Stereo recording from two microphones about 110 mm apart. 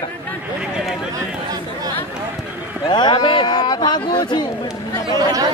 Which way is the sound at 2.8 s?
45° left (ahead or behind).